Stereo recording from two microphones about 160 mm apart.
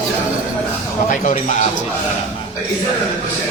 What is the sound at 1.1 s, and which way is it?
Speech, 50° left (ahead or behind).